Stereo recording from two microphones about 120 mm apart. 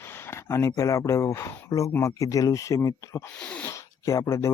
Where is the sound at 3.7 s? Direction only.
25° left (ahead or behind).